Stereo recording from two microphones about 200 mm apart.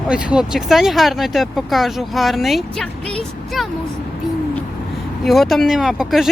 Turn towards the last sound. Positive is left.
turn(degrees=0)  # may be behind; listen again after turning